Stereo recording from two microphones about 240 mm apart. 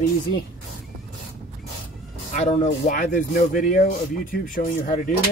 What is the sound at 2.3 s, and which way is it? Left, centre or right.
Speech, left.